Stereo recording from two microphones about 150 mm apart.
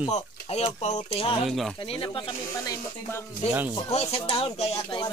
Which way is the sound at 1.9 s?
35° left (ahead or behind).